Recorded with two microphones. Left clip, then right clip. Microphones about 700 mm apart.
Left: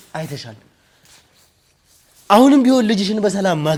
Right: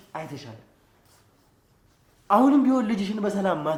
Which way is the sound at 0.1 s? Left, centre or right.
Left.